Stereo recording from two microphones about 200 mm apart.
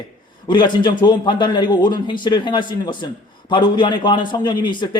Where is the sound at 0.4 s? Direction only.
25° left (ahead or behind).